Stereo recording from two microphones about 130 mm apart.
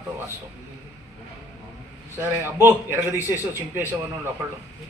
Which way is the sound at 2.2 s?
20° right (ahead or behind).